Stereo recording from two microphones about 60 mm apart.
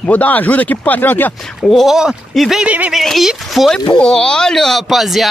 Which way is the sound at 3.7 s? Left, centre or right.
Centre.